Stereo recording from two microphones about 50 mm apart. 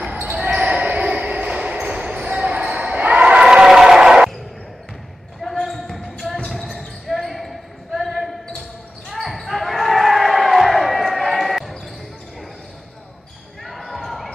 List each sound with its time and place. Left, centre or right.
0.3 s basketball bounce: right
3.1 s crowd: right
3.4 s a sound: centre
5.4 s basketball bounce: centre
13.7 s basketball bounce: centre